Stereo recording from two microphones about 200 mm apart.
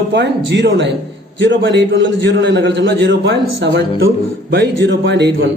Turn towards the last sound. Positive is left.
turn(degrees=-60)  # may be behind; listen again after turning